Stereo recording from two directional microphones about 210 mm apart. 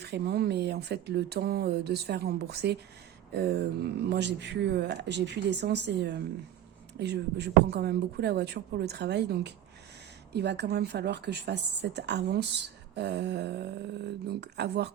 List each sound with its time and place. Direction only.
0.0 s speech: 50° right (ahead or behind)